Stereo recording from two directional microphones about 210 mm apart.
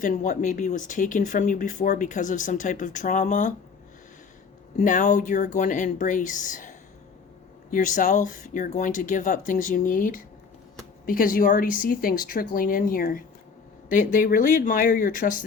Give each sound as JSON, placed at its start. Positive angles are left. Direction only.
{"t": 0.0, "sound": "speech", "side_deg": 35}
{"t": 4.8, "sound": "speech", "side_deg": 35}